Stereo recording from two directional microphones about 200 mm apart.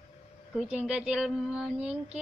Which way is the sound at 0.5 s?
5° right (ahead or behind).